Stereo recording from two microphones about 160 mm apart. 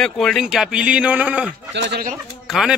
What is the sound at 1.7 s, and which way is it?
Speech, 90° right.